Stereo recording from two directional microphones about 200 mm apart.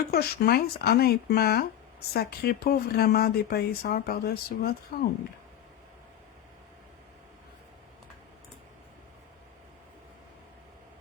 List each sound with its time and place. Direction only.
0.1 s speech: 50° left (ahead or behind)